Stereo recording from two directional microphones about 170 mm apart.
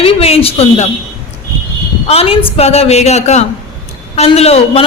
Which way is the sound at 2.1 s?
35° left (ahead or behind).